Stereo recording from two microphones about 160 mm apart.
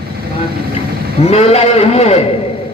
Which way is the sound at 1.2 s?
40° left (ahead or behind).